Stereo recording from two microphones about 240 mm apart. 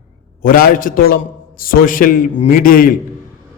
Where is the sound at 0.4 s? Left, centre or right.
Left.